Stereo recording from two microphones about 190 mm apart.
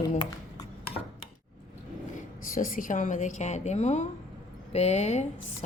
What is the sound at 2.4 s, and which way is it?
A woman's voice, 45° left (ahead or behind).